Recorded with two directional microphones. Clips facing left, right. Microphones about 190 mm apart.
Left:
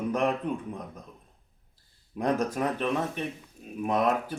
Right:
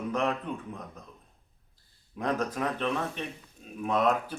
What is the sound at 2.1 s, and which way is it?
Speech, 10° left (ahead or behind).